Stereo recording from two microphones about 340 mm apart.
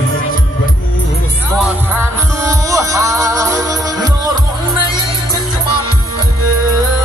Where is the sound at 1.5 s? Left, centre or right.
Centre.